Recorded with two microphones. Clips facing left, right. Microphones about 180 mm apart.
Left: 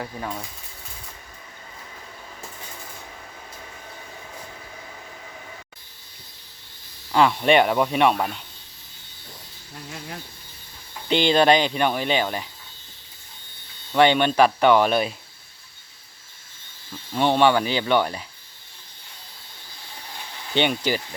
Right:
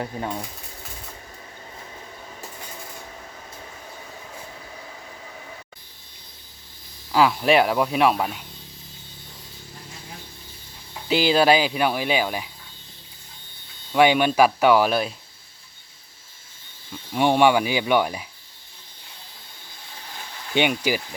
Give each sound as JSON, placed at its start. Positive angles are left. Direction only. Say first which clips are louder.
{"t": 0.0, "sound": "speech", "louder": "right 3 dB", "side_deg": -20}
{"t": 7.1, "sound": "speech", "louder": "even", "side_deg": 0}
{"t": 11.1, "sound": "speech", "louder": "even", "side_deg": -5}
{"t": 13.9, "sound": "speech", "louder": "even", "side_deg": -10}
{"t": 17.2, "sound": "speech", "louder": "right 1 dB", "side_deg": -10}
{"t": 20.5, "sound": "speech", "louder": "right 1 dB", "side_deg": -10}